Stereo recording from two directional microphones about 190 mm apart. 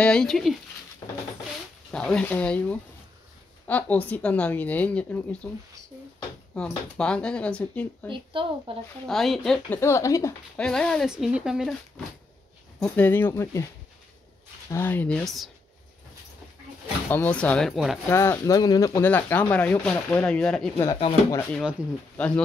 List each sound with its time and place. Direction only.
0.0 s speech: 5° left (ahead or behind)
1.9 s speech: 5° left (ahead or behind)
6.5 s speech: 5° left (ahead or behind)
8.1 s speech: 25° right (ahead or behind)
9.0 s speech: centre (ahead or behind)
9.8 s speech: 15° left (ahead or behind)
10.5 s speech: 5° left (ahead or behind)
12.8 s speech: 10° left (ahead or behind)
14.7 s speech: 10° left (ahead or behind)
17.1 s speech: 10° left (ahead or behind)
18.1 s speech: 15° left (ahead or behind)
20.8 s speech: 20° left (ahead or behind)
21.5 s speech: 5° left (ahead or behind)